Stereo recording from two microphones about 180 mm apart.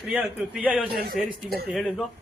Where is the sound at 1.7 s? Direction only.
Centre (ahead or behind).